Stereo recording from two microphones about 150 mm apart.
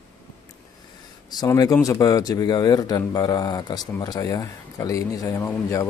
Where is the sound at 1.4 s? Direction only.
25° left (ahead or behind).